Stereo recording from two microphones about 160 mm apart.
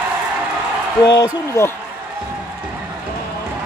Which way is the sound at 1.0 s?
25° left (ahead or behind).